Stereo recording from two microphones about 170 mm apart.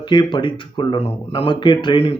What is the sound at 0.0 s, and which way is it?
Speech, 25° left (ahead or behind).